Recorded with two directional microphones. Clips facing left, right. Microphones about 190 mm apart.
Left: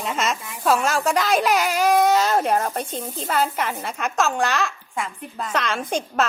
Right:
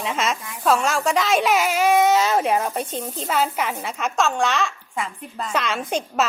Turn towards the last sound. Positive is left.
turn(degrees=-5)  # may be behind; listen again after turning